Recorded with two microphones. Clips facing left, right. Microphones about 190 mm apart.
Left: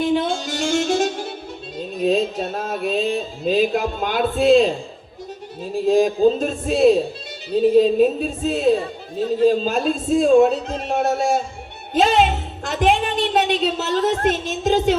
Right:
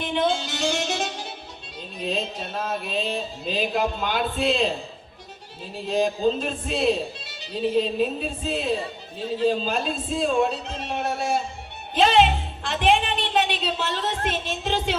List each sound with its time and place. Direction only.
0.2 s music: 45° left (ahead or behind)
1.8 s a man's voice: 45° left (ahead or behind)
5.8 s a man's voice: 45° left (ahead or behind)